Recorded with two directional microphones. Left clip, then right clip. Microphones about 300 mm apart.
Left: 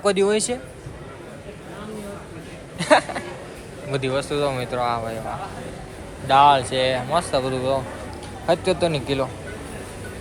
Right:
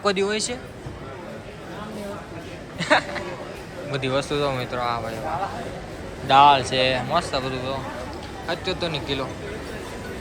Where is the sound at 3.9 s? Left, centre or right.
Centre.